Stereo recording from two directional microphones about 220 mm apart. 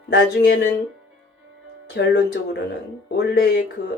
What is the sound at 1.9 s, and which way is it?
Speech, 50° left (ahead or behind).